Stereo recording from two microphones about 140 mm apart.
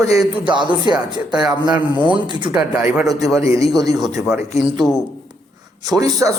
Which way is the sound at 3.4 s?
25° right (ahead or behind).